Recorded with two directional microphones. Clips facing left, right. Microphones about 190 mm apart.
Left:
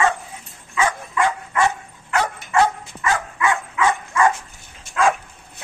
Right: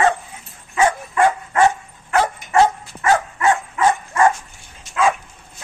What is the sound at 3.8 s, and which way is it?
Dog, 40° right (ahead or behind).